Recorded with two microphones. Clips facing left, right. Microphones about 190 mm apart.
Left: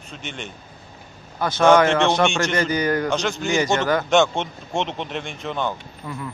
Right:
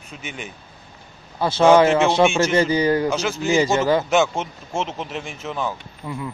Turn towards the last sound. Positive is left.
turn(degrees=-20)  # may be behind; listen again after turning